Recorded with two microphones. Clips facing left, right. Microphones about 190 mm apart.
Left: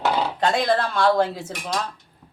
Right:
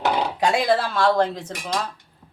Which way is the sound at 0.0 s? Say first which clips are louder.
Even; 10° right (ahead or behind).